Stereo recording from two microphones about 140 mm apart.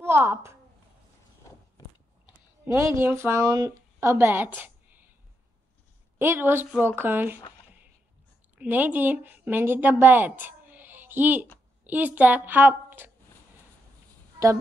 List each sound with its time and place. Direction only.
0.0 s a woman's voice: 15° right (ahead or behind)
2.6 s speech: 20° right (ahead or behind)
4.6 s a sound: 15° right (ahead or behind)
6.1 s a woman's voice: 15° right (ahead or behind)
8.5 s a woman's voice: 15° right (ahead or behind)